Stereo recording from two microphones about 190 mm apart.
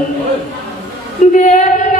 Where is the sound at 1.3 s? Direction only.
40° left (ahead or behind).